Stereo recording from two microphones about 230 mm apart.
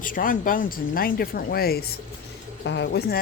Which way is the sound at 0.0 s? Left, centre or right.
Left.